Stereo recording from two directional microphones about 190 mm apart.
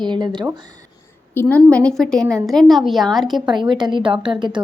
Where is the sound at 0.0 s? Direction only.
25° right (ahead or behind).